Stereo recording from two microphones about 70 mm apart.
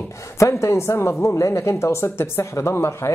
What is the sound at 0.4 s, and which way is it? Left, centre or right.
Speech, left.